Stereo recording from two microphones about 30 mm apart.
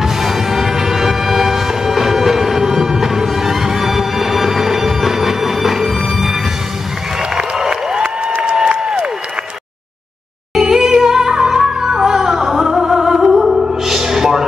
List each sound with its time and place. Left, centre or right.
0.0 s music: centre
10.6 s music: centre